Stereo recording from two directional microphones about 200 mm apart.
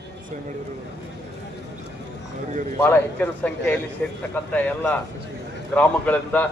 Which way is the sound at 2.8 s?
5° left (ahead or behind).